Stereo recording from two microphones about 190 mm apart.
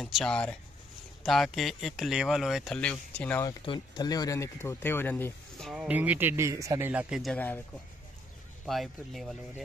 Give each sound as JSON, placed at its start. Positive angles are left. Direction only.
{"t": 0.0, "sound": "speech", "side_deg": 5}
{"t": 3.4, "sound": "speech", "side_deg": 25}
{"t": 8.6, "sound": "speech", "side_deg": 0}